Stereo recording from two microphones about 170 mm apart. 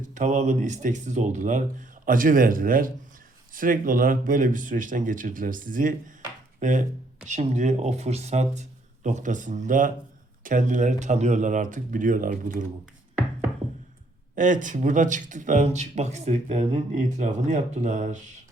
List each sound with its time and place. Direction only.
0.0 s speech: 45° right (ahead or behind)
14.3 s speech: 50° right (ahead or behind)